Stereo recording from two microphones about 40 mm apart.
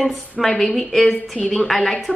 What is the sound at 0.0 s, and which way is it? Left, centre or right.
A woman's voice, centre.